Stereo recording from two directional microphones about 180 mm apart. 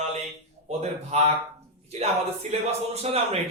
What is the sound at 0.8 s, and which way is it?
Speech, 35° right (ahead or behind).